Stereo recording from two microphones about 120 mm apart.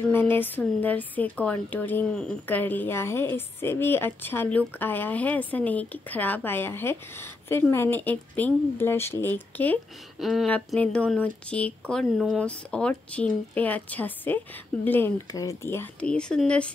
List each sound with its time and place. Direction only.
0.1 s speech: 15° left (ahead or behind)
10.1 s speech: centre (ahead or behind)
11.9 s speech: centre (ahead or behind)